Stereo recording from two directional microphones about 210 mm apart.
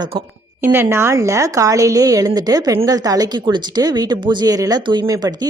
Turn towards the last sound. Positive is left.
turn(degrees=-20)  # may be behind; listen again after turning